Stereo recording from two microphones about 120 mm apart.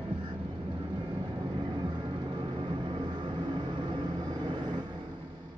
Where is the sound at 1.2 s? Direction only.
40° right (ahead or behind).